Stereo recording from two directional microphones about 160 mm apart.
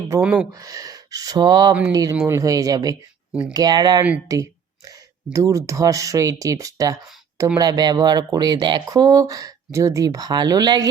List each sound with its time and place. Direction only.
0.2 s speech: 10° right (ahead or behind)
0.6 s speech: 25° right (ahead or behind)